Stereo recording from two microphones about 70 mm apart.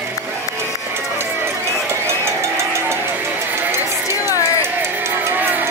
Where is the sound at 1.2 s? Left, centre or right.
Right.